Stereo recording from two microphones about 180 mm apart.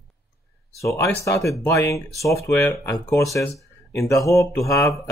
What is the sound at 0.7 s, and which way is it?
Speech, 15° left (ahead or behind).